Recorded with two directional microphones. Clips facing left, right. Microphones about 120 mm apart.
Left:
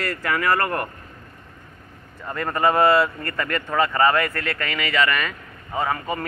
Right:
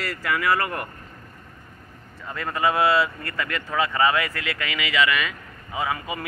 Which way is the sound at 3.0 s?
5° right (ahead or behind).